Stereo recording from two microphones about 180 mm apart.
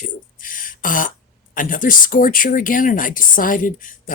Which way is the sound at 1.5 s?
50° left (ahead or behind).